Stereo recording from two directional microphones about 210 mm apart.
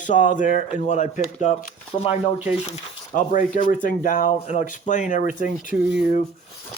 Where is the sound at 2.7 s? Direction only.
40° left (ahead or behind).